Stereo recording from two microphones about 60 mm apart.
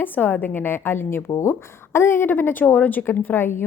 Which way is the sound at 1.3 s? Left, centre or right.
Left.